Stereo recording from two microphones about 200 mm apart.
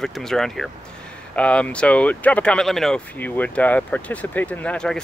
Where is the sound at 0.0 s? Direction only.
Centre (ahead or behind).